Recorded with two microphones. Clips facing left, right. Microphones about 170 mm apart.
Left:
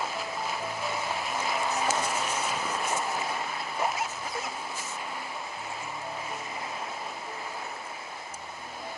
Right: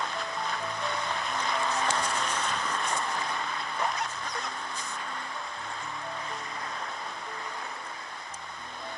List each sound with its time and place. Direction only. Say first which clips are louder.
0.0 s music: left 1 dB; 5° left (ahead or behind)